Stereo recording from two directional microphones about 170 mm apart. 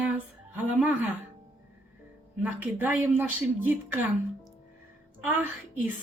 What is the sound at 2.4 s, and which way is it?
Speech, 10° right (ahead or behind).